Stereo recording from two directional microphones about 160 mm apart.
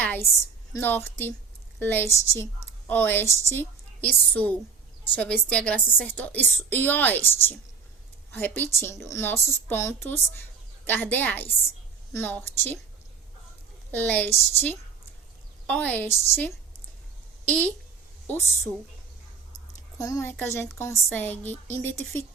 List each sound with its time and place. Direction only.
0.0 s a sound: 10° left (ahead or behind)
0.7 s a woman's voice: 15° left (ahead or behind)
13.9 s a woman's voice: 10° left (ahead or behind)
20.0 s a woman's voice: 20° left (ahead or behind)